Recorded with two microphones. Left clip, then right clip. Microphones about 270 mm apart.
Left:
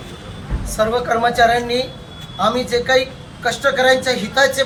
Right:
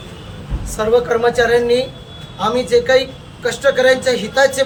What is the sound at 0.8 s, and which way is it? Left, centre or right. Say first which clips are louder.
A man's voice: right 2 dB; centre.